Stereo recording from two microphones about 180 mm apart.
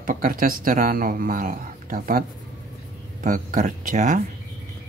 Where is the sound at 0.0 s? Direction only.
50° right (ahead or behind).